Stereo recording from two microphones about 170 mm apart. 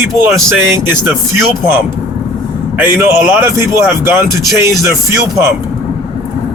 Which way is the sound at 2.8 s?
15° right (ahead or behind).